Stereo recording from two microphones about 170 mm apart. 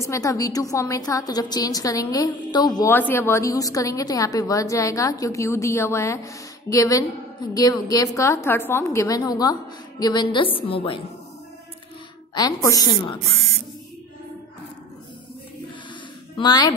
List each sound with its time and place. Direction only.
0.0 s a woman's voice: 15° left (ahead or behind)
12.4 s a woman's voice: 20° left (ahead or behind)
16.3 s a woman's voice: 25° left (ahead or behind)